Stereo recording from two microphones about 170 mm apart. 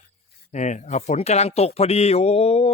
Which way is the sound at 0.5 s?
45° left (ahead or behind).